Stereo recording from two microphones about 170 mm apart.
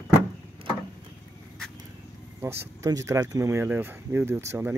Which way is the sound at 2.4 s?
15° right (ahead or behind).